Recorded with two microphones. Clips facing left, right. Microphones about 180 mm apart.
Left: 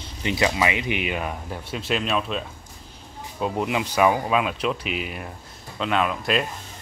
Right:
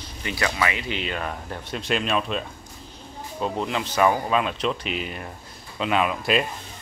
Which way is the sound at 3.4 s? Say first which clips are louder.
Left 2 dB; 10° left (ahead or behind).